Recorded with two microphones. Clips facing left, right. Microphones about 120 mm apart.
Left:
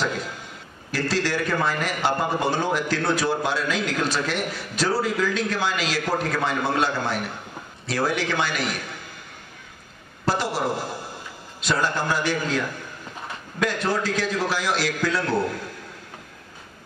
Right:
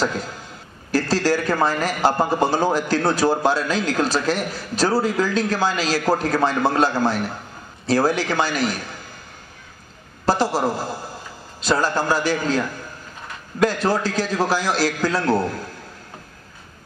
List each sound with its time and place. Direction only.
0.9 s a man's voice: 40° right (ahead or behind)
10.2 s a man's voice: 40° right (ahead or behind)
11.6 s a man's voice: 35° right (ahead or behind)